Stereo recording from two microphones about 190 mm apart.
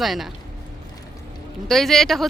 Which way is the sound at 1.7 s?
Centre (ahead or behind).